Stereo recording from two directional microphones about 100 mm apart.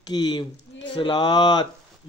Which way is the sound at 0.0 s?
45° left (ahead or behind).